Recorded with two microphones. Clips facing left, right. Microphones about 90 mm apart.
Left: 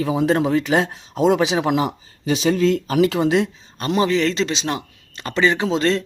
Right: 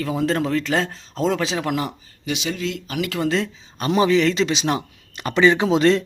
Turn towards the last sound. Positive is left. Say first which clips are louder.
# right 3 dB
turn(degrees=-10)  # may be behind; listen again after turning